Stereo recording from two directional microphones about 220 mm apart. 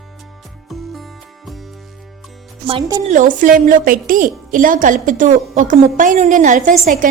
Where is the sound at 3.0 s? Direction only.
35° right (ahead or behind).